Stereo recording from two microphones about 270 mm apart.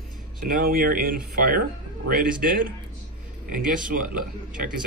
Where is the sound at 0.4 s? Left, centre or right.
Right.